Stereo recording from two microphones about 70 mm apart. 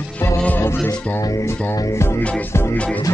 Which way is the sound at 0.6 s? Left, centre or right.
Left.